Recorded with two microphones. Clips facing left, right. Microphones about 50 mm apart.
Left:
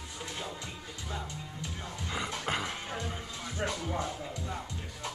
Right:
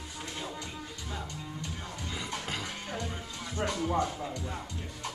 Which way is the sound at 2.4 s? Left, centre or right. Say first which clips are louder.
Left 4 dB; left.